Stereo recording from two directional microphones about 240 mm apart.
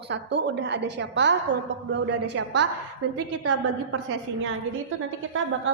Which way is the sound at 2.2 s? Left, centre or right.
Right.